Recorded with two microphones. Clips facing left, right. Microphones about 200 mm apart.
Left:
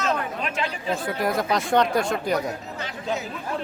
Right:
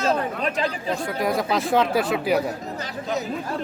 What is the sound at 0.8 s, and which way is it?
Speech, centre (ahead or behind).